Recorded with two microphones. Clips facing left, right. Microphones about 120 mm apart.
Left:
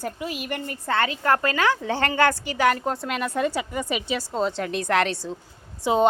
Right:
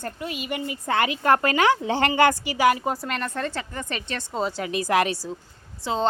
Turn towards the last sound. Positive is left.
turn(degrees=15)  # may be behind; listen again after turning